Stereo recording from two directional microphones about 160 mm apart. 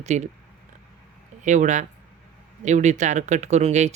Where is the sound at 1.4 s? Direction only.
50° right (ahead or behind).